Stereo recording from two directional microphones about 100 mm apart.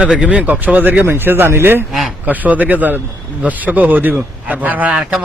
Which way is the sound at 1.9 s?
Centre (ahead or behind).